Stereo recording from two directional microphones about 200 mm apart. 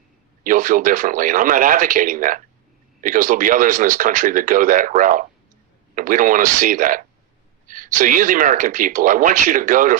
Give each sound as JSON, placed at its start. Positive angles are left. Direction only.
{"t": 0.4, "sound": "speech", "side_deg": -40}